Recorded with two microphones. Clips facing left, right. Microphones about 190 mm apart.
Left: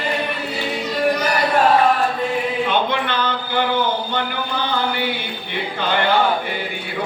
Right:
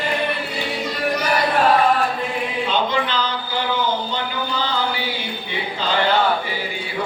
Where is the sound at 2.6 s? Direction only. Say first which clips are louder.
Left 1 dB; 60° left (ahead or behind).